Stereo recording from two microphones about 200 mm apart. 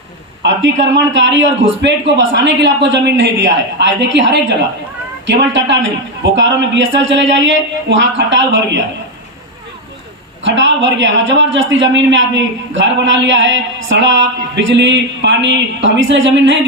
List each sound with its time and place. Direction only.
0.4 s a man's voice: 65° right (ahead or behind)
10.4 s a man's voice: 65° right (ahead or behind)